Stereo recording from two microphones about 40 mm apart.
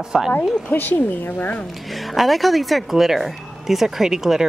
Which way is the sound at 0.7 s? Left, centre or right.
Left.